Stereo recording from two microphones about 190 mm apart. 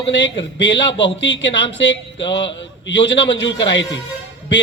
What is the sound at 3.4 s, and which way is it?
Speech, 70° left (ahead or behind).